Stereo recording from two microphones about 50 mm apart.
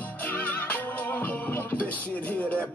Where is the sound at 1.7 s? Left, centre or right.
Left.